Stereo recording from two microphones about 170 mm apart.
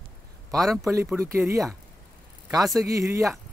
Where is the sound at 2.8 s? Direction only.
20° right (ahead or behind).